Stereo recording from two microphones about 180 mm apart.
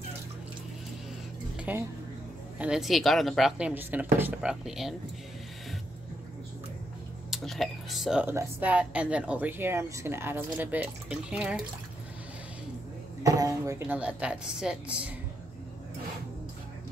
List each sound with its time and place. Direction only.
1.6 s speech: 10° right (ahead or behind)
7.2 s speech: centre (ahead or behind)
13.2 s speech: 15° right (ahead or behind)